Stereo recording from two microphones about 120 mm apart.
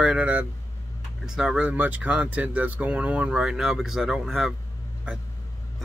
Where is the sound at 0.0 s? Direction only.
10° right (ahead or behind).